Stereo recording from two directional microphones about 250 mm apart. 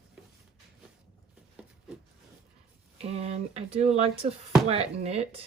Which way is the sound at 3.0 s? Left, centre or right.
Right.